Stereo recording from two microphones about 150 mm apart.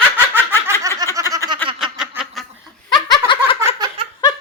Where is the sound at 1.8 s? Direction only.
5° right (ahead or behind).